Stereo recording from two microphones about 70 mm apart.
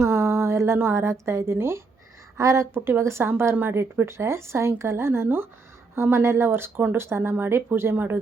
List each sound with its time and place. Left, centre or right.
0.0 s a sound: right
1.2 s speech: right
2.4 s a woman's voice: right
2.7 s speech: right